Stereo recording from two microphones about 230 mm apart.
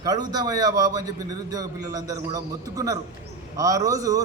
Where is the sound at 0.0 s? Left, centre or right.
Centre.